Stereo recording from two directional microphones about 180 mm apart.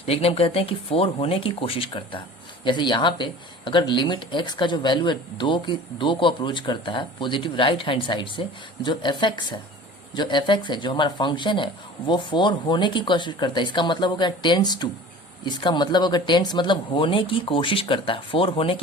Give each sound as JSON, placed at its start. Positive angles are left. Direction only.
{"t": 0.0, "sound": "speech", "side_deg": 35}